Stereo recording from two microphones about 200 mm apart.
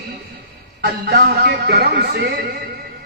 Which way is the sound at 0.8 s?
55° right (ahead or behind).